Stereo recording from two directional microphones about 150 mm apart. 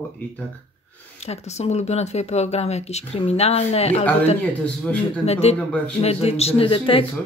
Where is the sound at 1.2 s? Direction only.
45° left (ahead or behind).